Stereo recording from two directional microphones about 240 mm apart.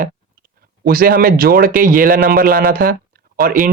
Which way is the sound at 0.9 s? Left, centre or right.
Right.